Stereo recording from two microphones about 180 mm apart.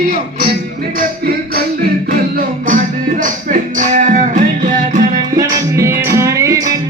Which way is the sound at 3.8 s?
45° right (ahead or behind).